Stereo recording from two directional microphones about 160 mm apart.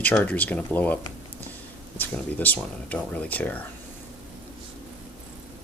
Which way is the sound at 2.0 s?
10° left (ahead or behind).